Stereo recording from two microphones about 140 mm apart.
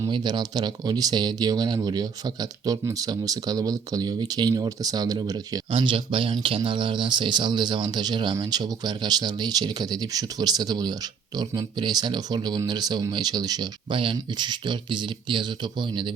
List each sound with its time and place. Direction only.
0.0 s speech: 30° right (ahead or behind)